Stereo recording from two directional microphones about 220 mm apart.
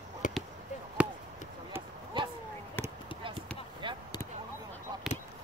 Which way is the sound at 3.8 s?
20° right (ahead or behind).